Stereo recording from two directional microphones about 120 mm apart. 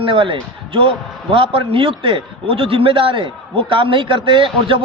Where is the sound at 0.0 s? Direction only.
45° right (ahead or behind).